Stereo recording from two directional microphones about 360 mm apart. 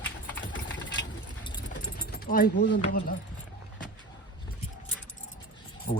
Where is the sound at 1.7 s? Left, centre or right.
Left.